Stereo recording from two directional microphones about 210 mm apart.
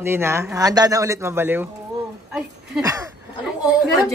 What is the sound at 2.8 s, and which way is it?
Speech, 15° right (ahead or behind).